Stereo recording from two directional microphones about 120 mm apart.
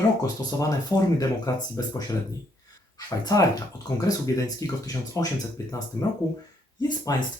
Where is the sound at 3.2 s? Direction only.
30° left (ahead or behind).